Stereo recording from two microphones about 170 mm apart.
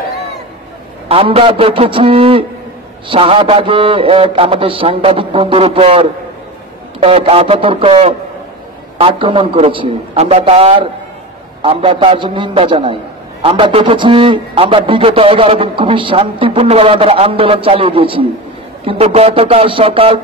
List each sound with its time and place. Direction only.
1.0 s a man's voice: 35° right (ahead or behind)